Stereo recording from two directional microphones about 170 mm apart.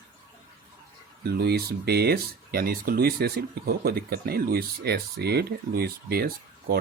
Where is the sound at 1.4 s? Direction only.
70° right (ahead or behind).